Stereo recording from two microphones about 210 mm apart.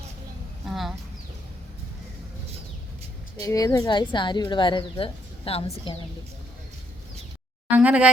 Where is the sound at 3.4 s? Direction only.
15° left (ahead or behind).